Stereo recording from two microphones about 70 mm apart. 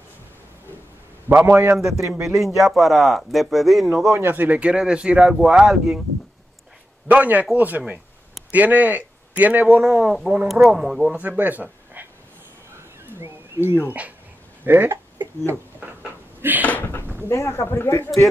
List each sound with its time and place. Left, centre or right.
1.3 s a man's voice: right
2.0 s speech: right
2.2 s speech: centre
4.1 s speech: right
4.4 s speech: right; by 5.9 s centre
7.1 s a man's voice: right
9.8 s speech: centre
11.1 s speech: right
13.0 s a sound: right
13.8 s a man's voice: right
15.8 s cupboard open or close: right
17.3 s a man's voice: left